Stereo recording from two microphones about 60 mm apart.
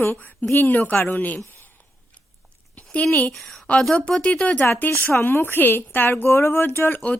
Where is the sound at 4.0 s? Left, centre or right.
Left.